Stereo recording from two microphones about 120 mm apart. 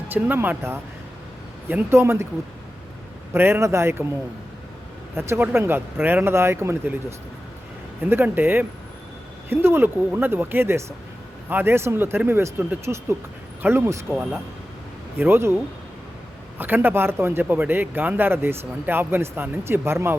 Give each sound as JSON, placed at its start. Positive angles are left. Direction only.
{"t": 0.1, "sound": "speech", "side_deg": -15}
{"t": 3.3, "sound": "speech", "side_deg": -20}
{"t": 5.1, "sound": "speech", "side_deg": -20}
{"t": 8.1, "sound": "a man's voice", "side_deg": -15}
{"t": 16.6, "sound": "a man's voice", "side_deg": -15}